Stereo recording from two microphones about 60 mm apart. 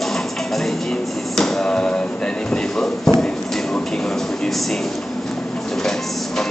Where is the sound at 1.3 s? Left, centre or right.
Centre.